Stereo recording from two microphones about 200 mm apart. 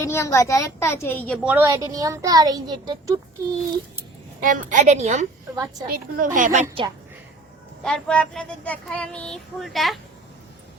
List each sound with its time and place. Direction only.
0.0 s a woman's voice: 15° left (ahead or behind)
1.4 s speech: 10° right (ahead or behind)
4.4 s a woman's voice: 45° right (ahead or behind)
7.9 s child singing: 5° left (ahead or behind)